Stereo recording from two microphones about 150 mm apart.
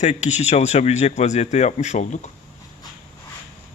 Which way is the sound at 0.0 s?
50° left (ahead or behind).